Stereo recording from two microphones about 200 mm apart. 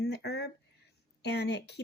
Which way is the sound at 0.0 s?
55° left (ahead or behind).